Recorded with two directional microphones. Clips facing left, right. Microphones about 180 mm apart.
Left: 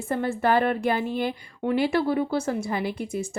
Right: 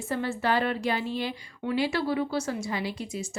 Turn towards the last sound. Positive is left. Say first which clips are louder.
# left 5 dB
turn(degrees=55)  # may be behind; listen again after turning